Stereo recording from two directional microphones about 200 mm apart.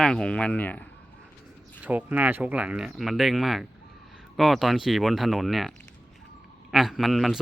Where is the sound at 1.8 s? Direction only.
10° right (ahead or behind).